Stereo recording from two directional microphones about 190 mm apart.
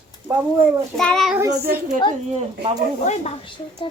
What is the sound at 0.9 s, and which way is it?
Child singing, centre (ahead or behind).